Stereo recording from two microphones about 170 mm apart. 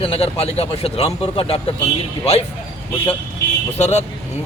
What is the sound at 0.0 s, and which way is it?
Speech, 35° left (ahead or behind).